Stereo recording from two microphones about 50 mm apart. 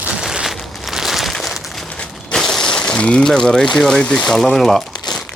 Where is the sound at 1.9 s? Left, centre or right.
Left.